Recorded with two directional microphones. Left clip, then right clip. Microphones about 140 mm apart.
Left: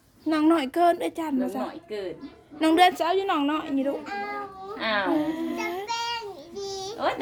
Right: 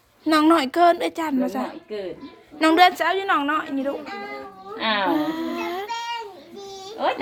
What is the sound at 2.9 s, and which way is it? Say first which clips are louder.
A woman's voice: right 3 dB; 30° left (ahead or behind).